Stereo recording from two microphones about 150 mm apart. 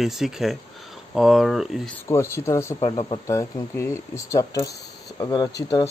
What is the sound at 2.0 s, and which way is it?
Speech, 20° left (ahead or behind).